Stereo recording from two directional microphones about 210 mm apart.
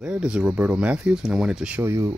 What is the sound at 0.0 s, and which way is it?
Speech, 5° right (ahead or behind).